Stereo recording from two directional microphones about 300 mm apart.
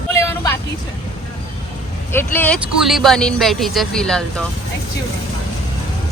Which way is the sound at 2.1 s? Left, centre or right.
Centre.